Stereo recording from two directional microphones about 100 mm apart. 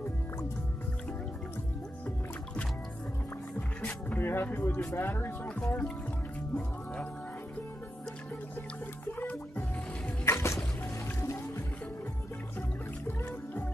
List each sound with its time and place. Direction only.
3.5 s speech: 15° left (ahead or behind)
9.2 s music: 20° left (ahead or behind)